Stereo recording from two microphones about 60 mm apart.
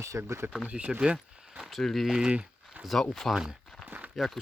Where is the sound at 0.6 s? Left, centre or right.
Centre.